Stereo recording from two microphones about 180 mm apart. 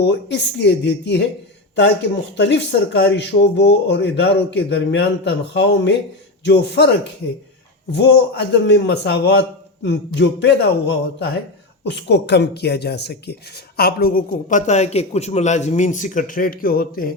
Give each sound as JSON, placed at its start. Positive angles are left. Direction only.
{"t": 0.0, "sound": "a man's voice", "side_deg": 75}